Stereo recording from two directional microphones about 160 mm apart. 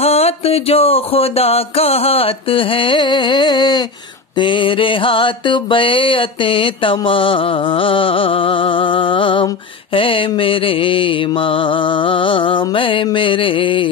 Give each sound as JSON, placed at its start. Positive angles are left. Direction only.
{"t": 0.0, "sound": "music", "side_deg": 40}